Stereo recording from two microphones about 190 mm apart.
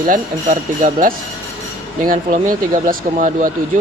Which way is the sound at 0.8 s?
40° right (ahead or behind).